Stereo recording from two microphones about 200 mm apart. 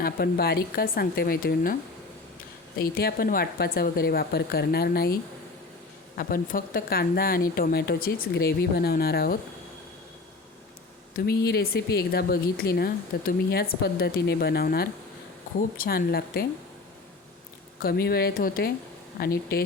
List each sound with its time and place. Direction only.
0.0 s speech: 50° left (ahead or behind)
2.7 s speech: 50° left (ahead or behind)
6.1 s speech: 45° left (ahead or behind)
11.1 s speech: 50° left (ahead or behind)
17.8 s speech: 50° left (ahead or behind)